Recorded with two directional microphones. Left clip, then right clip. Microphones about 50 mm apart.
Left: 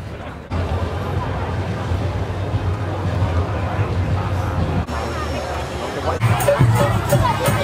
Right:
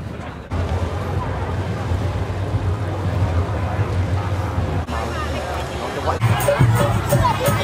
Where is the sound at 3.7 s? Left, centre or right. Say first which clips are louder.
Left 1 dB; left.